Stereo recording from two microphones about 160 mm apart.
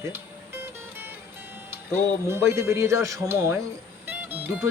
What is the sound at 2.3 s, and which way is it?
Speech, 15° right (ahead or behind).